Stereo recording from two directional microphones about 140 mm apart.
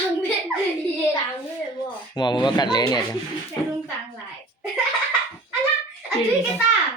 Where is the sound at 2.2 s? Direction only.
35° left (ahead or behind).